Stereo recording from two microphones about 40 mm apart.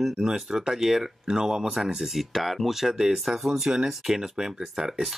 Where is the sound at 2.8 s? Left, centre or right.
Centre.